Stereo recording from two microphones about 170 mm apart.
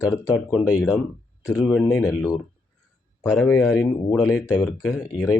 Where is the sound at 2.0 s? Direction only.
20° left (ahead or behind).